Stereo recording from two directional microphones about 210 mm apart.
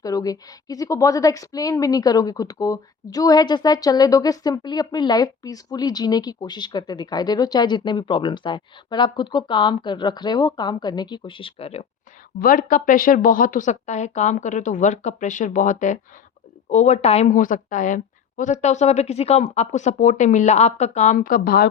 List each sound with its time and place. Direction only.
0.0 s a woman's voice: 15° left (ahead or behind)
12.4 s a woman's voice: 40° left (ahead or behind)